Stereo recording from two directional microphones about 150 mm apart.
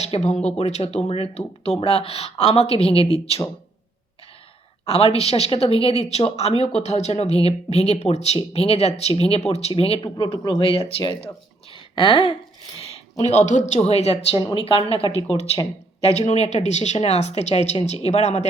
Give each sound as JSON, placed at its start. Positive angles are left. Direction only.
{"t": 0.0, "sound": "a woman's voice", "side_deg": 45}
{"t": 4.9, "sound": "a woman's voice", "side_deg": 40}
{"t": 11.7, "sound": "a sound", "side_deg": 35}
{"t": 13.1, "sound": "a woman's voice", "side_deg": 45}
{"t": 15.0, "sound": "speech", "side_deg": -30}
{"t": 16.2, "sound": "a woman's voice", "side_deg": 45}